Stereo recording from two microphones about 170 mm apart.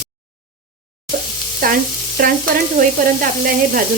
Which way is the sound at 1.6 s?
60° right (ahead or behind).